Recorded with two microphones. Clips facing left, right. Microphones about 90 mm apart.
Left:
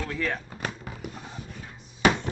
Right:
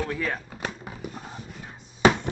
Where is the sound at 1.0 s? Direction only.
25° right (ahead or behind).